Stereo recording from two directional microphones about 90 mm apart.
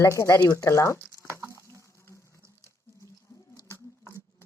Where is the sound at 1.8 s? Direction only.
35° left (ahead or behind).